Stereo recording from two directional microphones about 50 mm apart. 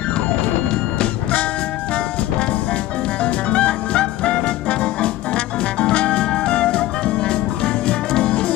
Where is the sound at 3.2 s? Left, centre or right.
Left.